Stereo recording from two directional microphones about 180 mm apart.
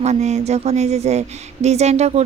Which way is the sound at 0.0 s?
40° right (ahead or behind).